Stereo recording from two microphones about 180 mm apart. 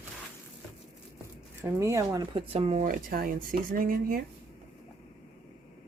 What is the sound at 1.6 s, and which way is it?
Speech, 15° right (ahead or behind).